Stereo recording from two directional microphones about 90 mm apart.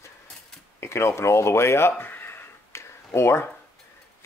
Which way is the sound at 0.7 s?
30° left (ahead or behind).